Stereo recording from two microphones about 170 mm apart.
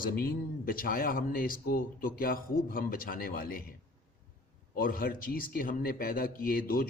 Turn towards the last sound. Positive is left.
turn(degrees=60)  # may be behind; listen again after turning